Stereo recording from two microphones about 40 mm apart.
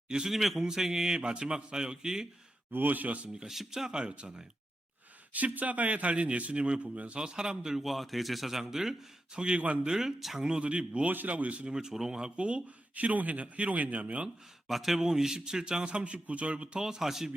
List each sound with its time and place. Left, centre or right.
0.3 s a man's voice: centre
2.7 s speech: right
3.4 s a man's voice: centre
4.0 s a man's voice: right
5.3 s a man's voice: right
7.2 s a man's voice: centre
7.9 s a man's voice: centre
9.6 s a man's voice: right
9.8 s a man's voice: centre
10.5 s a man's voice: right
11.7 s a man's voice: centre
12.9 s a man's voice: right
14.7 s a man's voice: centre; by 16.8 s right
16.8 s a man's voice: centre